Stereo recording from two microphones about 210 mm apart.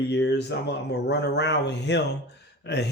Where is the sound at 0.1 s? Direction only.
55° left (ahead or behind).